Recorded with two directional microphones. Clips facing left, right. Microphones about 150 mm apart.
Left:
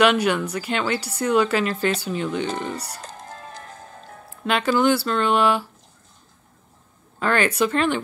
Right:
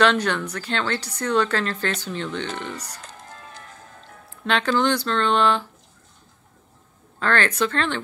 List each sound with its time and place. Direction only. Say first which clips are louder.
0.0 s speech: left 2 dB; 10° left (ahead or behind)
3.0 s music: left 4 dB; 40° left (ahead or behind)
4.5 s speech: left 2 dB; 5° left (ahead or behind)
7.2 s speech: left 2 dB; 10° left (ahead or behind)